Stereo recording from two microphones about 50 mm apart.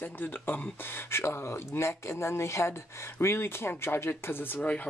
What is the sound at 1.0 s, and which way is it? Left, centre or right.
Speech, left.